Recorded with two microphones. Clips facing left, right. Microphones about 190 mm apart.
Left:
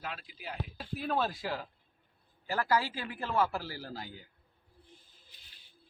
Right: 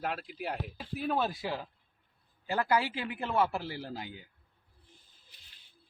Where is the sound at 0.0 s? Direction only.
60° right (ahead or behind).